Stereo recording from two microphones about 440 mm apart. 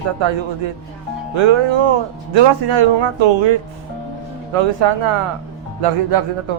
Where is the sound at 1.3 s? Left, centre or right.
Right.